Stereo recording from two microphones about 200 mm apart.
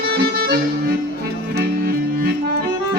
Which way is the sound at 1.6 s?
50° right (ahead or behind).